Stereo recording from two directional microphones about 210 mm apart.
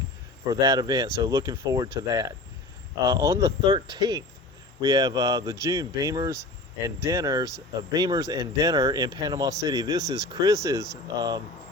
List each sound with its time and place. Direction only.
0.4 s speech: 15° right (ahead or behind)